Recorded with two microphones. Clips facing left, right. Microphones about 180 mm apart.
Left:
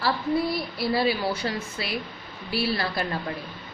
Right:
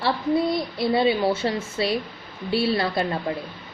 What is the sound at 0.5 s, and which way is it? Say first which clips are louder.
Speech: right 4 dB; 25° right (ahead or behind).